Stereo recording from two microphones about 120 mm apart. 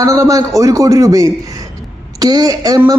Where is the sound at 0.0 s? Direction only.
25° right (ahead or behind).